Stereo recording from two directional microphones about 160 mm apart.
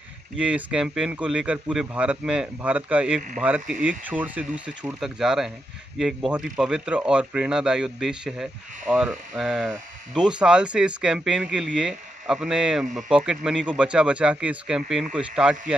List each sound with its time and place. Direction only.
0.4 s a man's voice: 5° right (ahead or behind)